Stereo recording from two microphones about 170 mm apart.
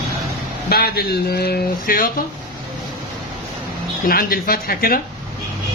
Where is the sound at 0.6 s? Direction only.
65° left (ahead or behind).